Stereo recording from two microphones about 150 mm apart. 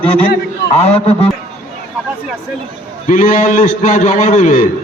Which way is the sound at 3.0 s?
60° left (ahead or behind).